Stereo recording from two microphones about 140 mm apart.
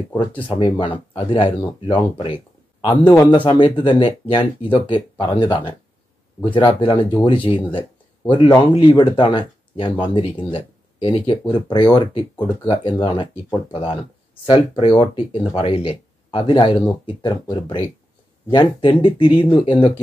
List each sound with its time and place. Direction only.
0.2 s speech: 35° left (ahead or behind)